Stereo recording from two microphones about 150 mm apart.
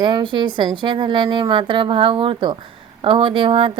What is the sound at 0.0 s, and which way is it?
A woman's voice, 30° right (ahead or behind).